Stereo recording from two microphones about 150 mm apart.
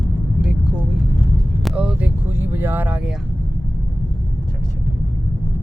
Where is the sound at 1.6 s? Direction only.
5° right (ahead or behind).